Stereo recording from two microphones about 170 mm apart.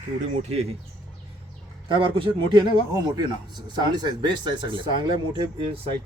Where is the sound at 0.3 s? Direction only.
40° right (ahead or behind).